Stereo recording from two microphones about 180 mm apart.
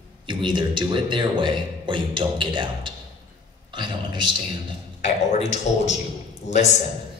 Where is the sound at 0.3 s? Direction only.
25° right (ahead or behind).